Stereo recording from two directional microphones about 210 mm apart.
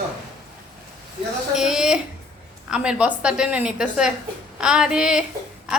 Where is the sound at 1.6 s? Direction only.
Centre (ahead or behind).